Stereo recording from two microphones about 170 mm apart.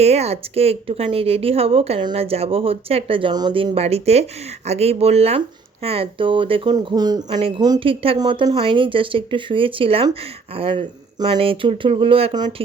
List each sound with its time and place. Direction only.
0.0 s speech: 40° right (ahead or behind)